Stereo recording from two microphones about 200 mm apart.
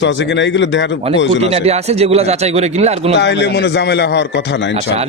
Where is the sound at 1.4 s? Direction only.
30° right (ahead or behind).